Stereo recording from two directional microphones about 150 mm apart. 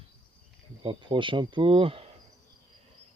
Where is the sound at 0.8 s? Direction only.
30° right (ahead or behind).